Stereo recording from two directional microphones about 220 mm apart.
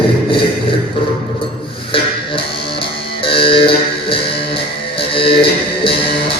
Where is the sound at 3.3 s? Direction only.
25° left (ahead or behind).